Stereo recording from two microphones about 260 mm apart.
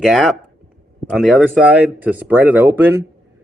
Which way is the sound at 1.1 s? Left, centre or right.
Centre.